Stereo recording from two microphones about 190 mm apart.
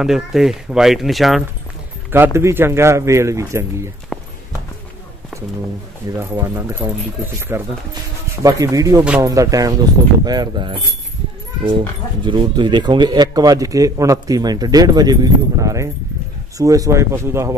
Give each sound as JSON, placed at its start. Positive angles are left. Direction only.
{"t": 0.0, "sound": "speech", "side_deg": 0}
{"t": 2.1, "sound": "speech", "side_deg": -15}
{"t": 4.1, "sound": "run", "side_deg": 0}
{"t": 6.1, "sound": "a man's voice", "side_deg": -15}
{"t": 12.3, "sound": "a man's voice", "side_deg": -25}